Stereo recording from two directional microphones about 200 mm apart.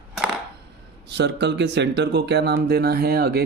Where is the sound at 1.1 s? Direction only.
60° right (ahead or behind).